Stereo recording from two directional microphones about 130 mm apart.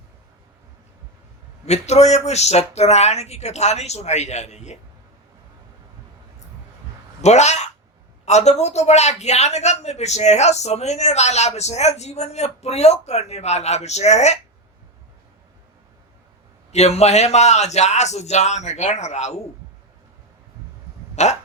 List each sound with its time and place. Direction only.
1.6 s speech: 60° left (ahead or behind)
7.2 s speech: 60° left (ahead or behind)
16.7 s speech: 55° left (ahead or behind)
21.2 s speech: 60° left (ahead or behind)